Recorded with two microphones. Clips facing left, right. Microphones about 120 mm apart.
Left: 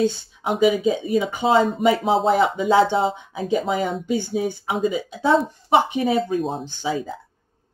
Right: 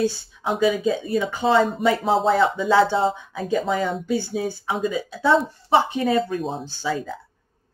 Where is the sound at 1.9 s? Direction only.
5° left (ahead or behind).